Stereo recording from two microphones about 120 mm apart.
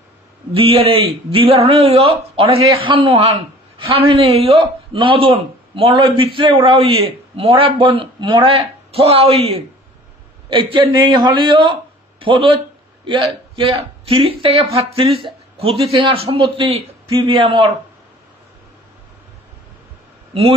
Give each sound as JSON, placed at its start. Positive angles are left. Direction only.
{"t": 0.5, "sound": "a man's voice", "side_deg": -50}
{"t": 10.5, "sound": "a man's voice", "side_deg": -45}